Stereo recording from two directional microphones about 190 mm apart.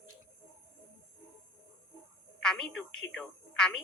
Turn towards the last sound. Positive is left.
turn(degrees=5)  # may be behind; listen again after turning